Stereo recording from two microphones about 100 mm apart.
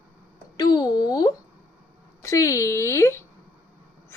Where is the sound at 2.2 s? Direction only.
30° left (ahead or behind).